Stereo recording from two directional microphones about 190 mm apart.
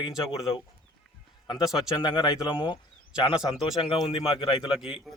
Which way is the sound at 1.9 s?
25° left (ahead or behind).